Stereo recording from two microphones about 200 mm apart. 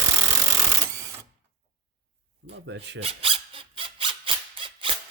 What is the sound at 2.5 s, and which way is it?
Filing, 60° right (ahead or behind).